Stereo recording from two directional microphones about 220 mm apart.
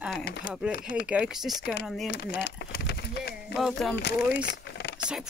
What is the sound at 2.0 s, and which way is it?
Speech, 50° left (ahead or behind).